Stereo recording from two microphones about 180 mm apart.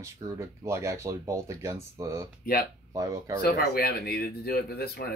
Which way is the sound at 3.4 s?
55° left (ahead or behind).